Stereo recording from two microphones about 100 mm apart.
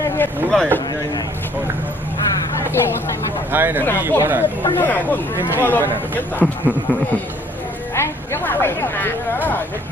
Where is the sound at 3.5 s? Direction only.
20° right (ahead or behind).